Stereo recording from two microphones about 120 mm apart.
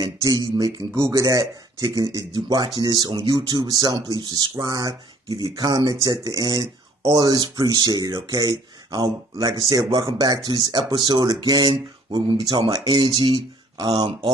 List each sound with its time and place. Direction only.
0.0 s speech: 30° right (ahead or behind)